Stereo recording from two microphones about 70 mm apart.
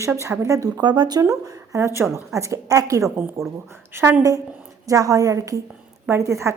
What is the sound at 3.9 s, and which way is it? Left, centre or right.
Speech, right.